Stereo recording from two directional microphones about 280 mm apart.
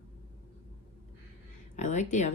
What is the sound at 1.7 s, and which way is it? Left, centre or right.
Speech, left.